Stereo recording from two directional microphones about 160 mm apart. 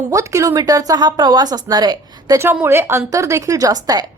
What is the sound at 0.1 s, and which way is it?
A woman's voice, 20° right (ahead or behind).